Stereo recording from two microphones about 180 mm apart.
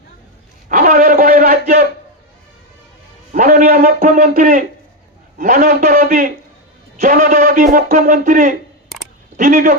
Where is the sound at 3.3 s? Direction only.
50° right (ahead or behind).